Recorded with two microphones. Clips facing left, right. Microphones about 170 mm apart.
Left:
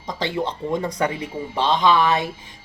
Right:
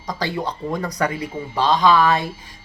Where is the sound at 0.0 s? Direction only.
25° left (ahead or behind).